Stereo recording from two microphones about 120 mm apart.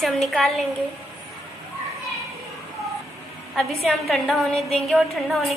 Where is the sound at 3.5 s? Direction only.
Centre (ahead or behind).